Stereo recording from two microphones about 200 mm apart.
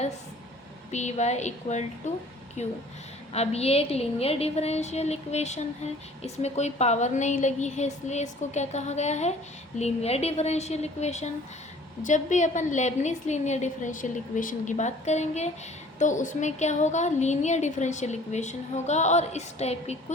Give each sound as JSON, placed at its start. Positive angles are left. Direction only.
{"t": 0.9, "sound": "a woman's voice", "side_deg": 35}
{"t": 3.3, "sound": "a woman's voice", "side_deg": 30}